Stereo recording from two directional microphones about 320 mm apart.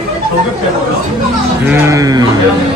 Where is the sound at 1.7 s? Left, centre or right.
Centre.